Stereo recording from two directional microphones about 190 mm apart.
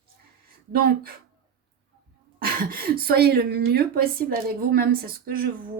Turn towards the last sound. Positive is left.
turn(degrees=-50)  # may be behind; listen again after turning